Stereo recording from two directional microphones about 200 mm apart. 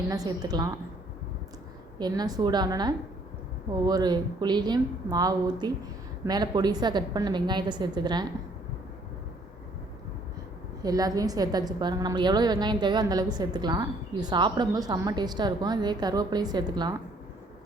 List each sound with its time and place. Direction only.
0.1 s a woman's voice: 20° right (ahead or behind)
2.0 s a woman's voice: 20° right (ahead or behind)
10.8 s a woman's voice: 20° right (ahead or behind)